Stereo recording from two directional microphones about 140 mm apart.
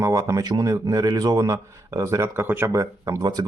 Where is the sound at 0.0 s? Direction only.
25° right (ahead or behind).